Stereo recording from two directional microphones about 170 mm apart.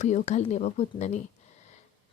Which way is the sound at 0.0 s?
45° left (ahead or behind).